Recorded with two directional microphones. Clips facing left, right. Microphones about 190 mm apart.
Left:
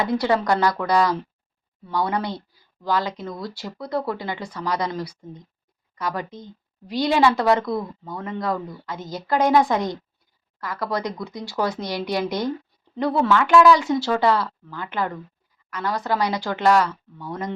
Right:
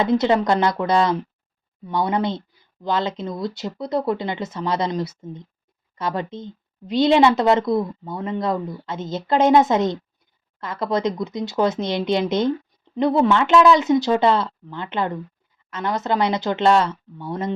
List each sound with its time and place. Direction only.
0.0 s speech: 20° right (ahead or behind)